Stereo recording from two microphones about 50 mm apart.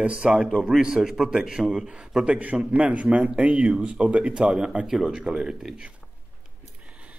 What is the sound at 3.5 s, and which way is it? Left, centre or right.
A man's voice, centre.